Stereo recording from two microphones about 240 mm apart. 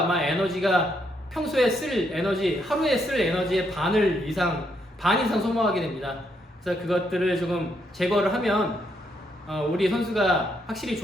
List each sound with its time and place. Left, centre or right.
0.1 s a man's voice: centre